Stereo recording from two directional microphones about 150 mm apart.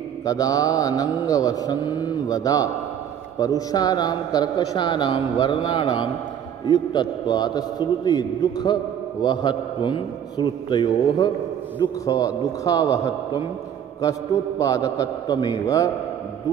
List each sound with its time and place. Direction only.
0.2 s a man's voice: 25° left (ahead or behind)